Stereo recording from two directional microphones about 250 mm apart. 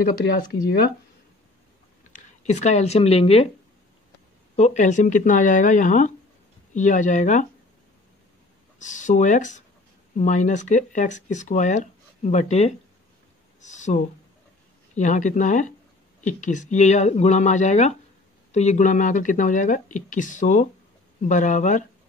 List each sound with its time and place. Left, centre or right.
2.4 s speech: left
4.6 s speech: left
8.7 s speech: left